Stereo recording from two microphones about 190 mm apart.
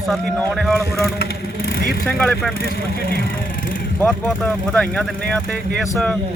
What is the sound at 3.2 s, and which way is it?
Vehicle, 45° left (ahead or behind).